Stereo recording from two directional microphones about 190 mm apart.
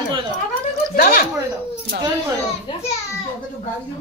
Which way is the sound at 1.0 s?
50° left (ahead or behind).